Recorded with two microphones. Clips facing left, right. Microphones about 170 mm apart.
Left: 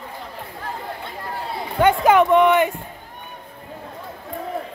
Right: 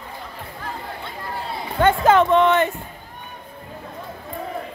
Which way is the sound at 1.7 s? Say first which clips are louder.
Left 1 dB; 15° left (ahead or behind).